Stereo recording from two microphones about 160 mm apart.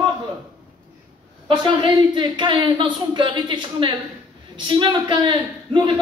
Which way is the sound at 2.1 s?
30° right (ahead or behind).